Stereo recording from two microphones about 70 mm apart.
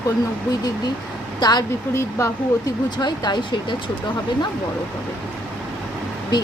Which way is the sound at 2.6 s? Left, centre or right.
Left.